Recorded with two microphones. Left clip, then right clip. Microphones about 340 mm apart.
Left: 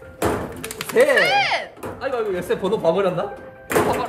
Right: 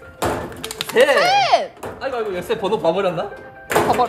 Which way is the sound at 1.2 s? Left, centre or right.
Centre.